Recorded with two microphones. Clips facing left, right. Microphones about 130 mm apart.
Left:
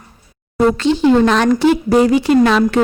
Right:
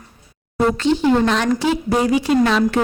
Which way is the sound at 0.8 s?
90° left.